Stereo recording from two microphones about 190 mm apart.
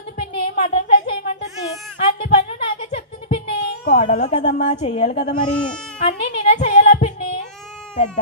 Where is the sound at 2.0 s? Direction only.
30° left (ahead or behind).